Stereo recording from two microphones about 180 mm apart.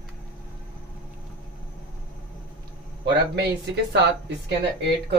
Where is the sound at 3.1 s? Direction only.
70° right (ahead or behind).